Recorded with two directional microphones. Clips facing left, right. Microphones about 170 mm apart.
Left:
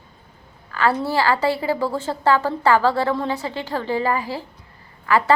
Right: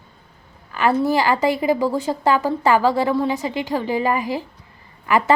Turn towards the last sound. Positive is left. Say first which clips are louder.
# even
turn(degrees=-15)  # may be behind; listen again after turning